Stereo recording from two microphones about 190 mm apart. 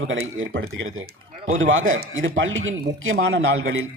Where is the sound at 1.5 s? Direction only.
90° right.